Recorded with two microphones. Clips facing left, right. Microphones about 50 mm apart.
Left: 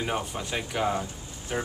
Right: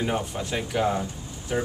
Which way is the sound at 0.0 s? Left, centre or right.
Centre.